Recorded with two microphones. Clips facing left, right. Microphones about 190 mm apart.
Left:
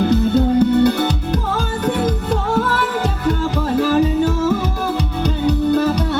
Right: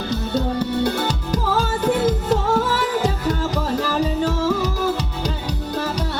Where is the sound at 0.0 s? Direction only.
55° left (ahead or behind).